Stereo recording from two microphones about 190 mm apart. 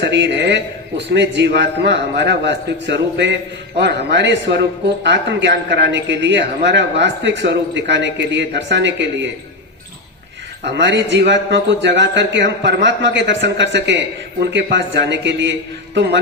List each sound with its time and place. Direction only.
0.0 s a man's voice: 65° right (ahead or behind)
10.7 s a man's voice: 70° right (ahead or behind)